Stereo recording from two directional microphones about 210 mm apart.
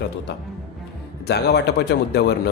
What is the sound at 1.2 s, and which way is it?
Speech, 50° left (ahead or behind).